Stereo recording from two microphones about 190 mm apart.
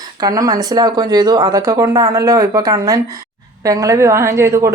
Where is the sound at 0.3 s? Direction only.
20° right (ahead or behind).